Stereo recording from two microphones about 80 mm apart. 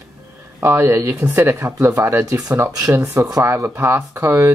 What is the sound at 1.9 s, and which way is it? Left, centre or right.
Speech, right.